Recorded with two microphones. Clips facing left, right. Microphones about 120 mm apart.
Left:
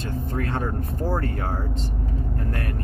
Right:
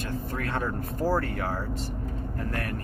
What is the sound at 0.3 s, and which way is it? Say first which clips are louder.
Vehicle: left 4 dB; 25° left (ahead or behind).